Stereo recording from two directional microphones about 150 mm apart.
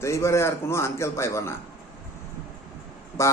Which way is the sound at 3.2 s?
20° left (ahead or behind).